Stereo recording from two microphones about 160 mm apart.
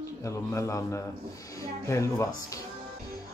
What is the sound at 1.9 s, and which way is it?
Speech, 20° left (ahead or behind).